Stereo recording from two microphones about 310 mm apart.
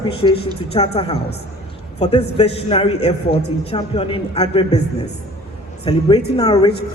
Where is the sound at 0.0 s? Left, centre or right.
Centre.